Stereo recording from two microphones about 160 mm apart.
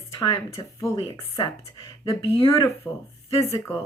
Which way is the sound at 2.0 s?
35° left (ahead or behind).